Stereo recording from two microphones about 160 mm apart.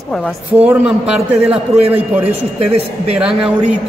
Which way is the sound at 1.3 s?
40° right (ahead or behind).